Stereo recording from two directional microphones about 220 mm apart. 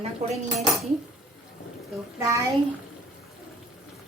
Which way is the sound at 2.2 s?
15° right (ahead or behind).